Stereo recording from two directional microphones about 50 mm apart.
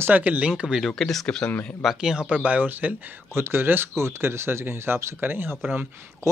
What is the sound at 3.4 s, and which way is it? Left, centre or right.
Speech, right.